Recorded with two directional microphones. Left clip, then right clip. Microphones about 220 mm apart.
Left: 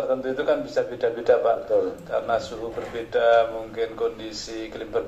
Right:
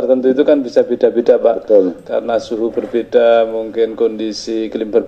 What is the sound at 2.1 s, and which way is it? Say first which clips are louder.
A man's voice: right 8 dB; 35° right (ahead or behind).